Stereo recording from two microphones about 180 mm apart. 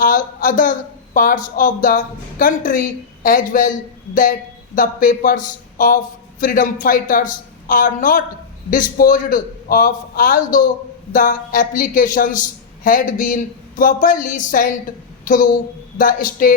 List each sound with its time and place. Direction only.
0.0 s speech: 50° left (ahead or behind)
15.2 s a sound: 50° left (ahead or behind)
16.0 s speech: 50° left (ahead or behind)